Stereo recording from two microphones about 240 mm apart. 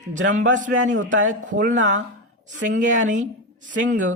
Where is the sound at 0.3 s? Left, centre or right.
Right.